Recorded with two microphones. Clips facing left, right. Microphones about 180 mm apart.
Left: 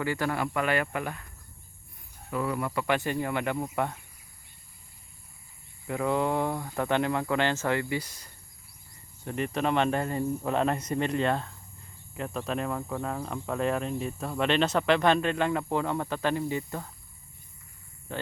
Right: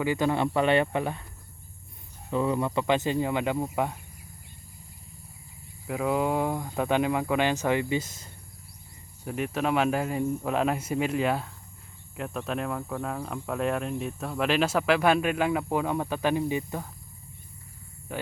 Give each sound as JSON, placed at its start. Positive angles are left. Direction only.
{"t": 0.0, "sound": "speech", "side_deg": -20}
{"t": 2.3, "sound": "speech", "side_deg": -25}
{"t": 5.9, "sound": "speech", "side_deg": -5}
{"t": 9.2, "sound": "speech", "side_deg": -5}
{"t": 18.1, "sound": "speech", "side_deg": -10}